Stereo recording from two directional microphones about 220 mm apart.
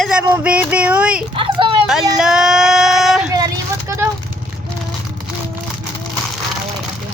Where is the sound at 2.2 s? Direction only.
5° right (ahead or behind).